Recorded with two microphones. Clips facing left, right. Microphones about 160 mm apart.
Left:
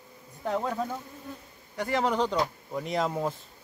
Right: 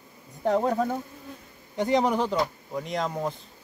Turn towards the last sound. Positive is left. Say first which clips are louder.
# even
turn(degrees=5)  # may be behind; listen again after turning